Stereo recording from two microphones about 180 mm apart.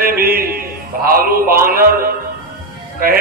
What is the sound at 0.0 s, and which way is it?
Music, 55° right (ahead or behind).